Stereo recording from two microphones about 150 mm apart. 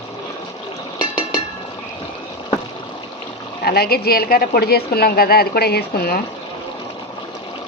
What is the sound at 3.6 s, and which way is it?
A woman's voice, 90° left.